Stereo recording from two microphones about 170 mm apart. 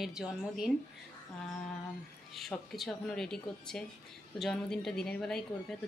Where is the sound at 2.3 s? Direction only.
Centre (ahead or behind).